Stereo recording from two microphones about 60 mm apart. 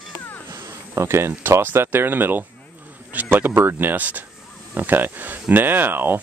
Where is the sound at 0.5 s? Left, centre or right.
Right.